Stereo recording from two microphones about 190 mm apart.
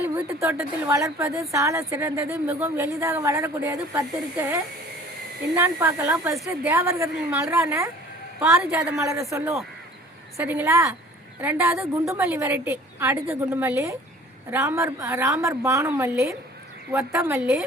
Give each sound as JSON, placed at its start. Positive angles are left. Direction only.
{"t": 0.0, "sound": "a woman's voice", "side_deg": -15}